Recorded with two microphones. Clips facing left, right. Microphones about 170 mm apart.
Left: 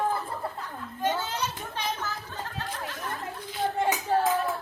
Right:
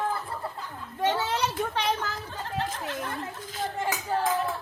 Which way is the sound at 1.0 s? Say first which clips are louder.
Right 3 dB; 65° right (ahead or behind).